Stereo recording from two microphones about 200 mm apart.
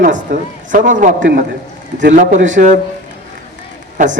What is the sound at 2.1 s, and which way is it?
Speech, 40° right (ahead or behind).